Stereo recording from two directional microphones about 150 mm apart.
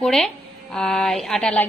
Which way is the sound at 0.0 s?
5° left (ahead or behind).